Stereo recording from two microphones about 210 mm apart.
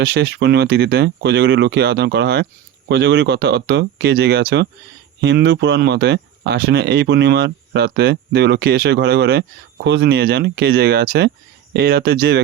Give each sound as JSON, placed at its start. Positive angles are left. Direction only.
{"t": 0.0, "sound": "speech", "side_deg": -50}